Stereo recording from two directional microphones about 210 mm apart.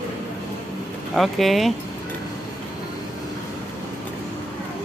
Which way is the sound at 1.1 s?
Centre (ahead or behind).